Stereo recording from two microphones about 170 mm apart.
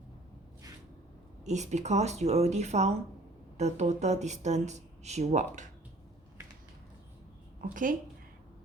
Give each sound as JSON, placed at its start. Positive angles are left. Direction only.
{"t": 1.5, "sound": "a woman's voice", "side_deg": -45}
{"t": 7.6, "sound": "speech", "side_deg": -50}